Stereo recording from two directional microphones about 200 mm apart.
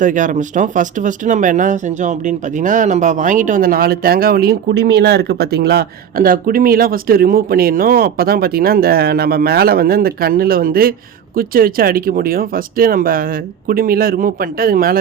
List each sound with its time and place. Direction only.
0.0 s speech: 40° right (ahead or behind)